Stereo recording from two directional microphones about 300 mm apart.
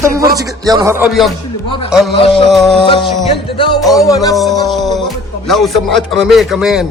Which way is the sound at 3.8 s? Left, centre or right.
Centre.